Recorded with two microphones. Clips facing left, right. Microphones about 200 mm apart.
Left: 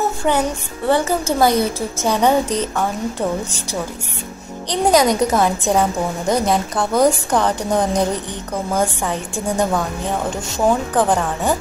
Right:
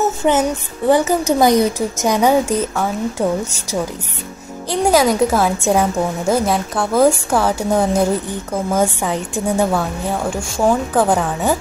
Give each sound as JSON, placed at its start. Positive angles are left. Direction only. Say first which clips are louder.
{"t": 0.2, "sound": "music", "louder": "right 3 dB", "side_deg": -20}
{"t": 0.8, "sound": "a woman's voice", "louder": "right 3 dB", "side_deg": -15}
{"t": 4.8, "sound": "a woman's voice", "louder": "right 1 dB", "side_deg": 0}
{"t": 11.0, "sound": "a woman's voice", "louder": "right 1 dB", "side_deg": -10}